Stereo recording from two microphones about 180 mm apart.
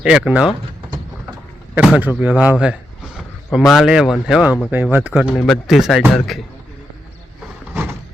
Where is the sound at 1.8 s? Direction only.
5° right (ahead or behind).